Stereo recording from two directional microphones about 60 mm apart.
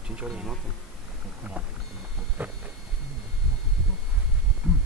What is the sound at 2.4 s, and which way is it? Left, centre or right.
Speech, right.